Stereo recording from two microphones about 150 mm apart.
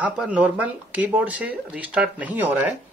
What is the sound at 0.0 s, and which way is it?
Speech, 10° right (ahead or behind).